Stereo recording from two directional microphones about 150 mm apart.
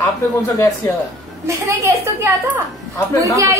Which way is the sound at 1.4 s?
20° right (ahead or behind).